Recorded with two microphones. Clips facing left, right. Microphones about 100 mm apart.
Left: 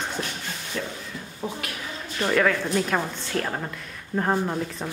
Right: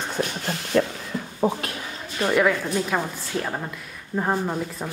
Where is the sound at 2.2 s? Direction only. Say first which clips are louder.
Right 2 dB; 15° right (ahead or behind).